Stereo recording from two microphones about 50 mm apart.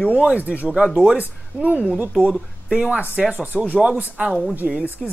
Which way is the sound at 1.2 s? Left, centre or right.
Right.